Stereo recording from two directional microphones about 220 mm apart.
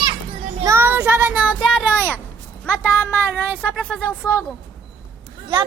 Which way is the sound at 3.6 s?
5° left (ahead or behind).